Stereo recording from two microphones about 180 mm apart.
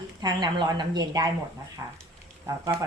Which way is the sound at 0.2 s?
25° right (ahead or behind).